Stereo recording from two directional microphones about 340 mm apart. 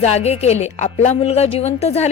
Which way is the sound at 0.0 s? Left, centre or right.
Centre.